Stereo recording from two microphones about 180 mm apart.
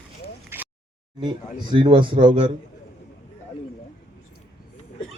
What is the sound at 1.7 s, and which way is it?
Speech, 25° right (ahead or behind).